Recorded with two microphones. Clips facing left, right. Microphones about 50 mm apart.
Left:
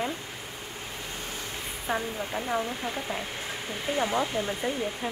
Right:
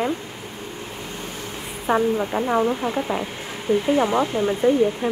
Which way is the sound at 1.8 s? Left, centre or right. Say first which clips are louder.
Right 11 dB; right.